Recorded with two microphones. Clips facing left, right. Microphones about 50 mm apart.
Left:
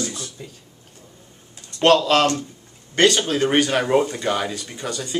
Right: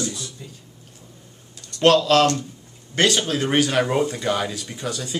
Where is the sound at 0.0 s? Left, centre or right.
Left.